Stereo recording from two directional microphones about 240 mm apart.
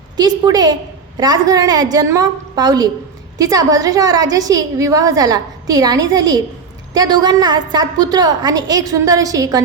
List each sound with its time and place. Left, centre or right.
0.2 s a woman's voice: centre